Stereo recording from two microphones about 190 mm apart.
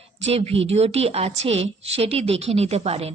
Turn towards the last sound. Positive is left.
turn(degrees=-30)  # may be behind; listen again after turning